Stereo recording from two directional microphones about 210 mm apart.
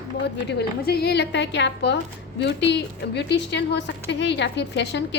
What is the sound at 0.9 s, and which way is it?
A woman's voice, 50° left (ahead or behind).